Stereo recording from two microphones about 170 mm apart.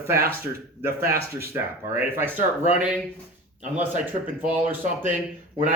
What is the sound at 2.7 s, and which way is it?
Speech, 10° right (ahead or behind).